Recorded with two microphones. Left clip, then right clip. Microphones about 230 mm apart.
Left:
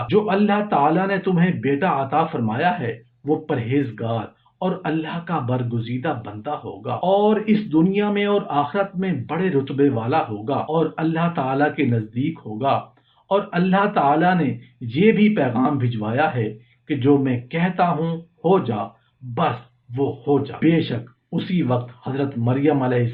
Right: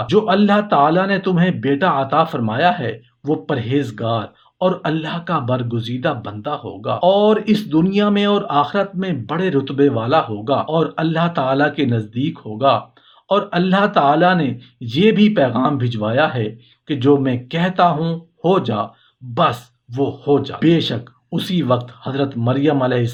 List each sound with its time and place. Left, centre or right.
0.1 s speech: right